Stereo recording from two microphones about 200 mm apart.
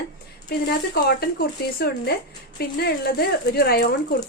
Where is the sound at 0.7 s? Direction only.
50° left (ahead or behind).